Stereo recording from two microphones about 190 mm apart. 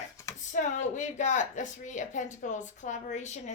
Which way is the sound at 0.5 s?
40° left (ahead or behind).